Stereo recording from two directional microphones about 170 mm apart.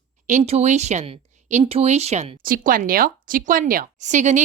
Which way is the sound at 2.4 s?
55° right (ahead or behind).